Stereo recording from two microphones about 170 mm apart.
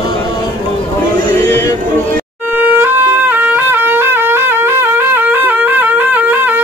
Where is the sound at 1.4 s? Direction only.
15° left (ahead or behind).